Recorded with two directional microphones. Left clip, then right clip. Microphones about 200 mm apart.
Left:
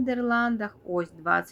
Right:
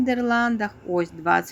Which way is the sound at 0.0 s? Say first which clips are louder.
Right 4 dB; 20° right (ahead or behind).